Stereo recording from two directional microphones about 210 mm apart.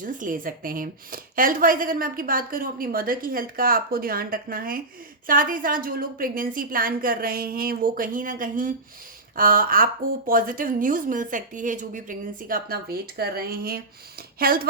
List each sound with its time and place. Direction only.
0.0 s a woman's voice: 40° right (ahead or behind)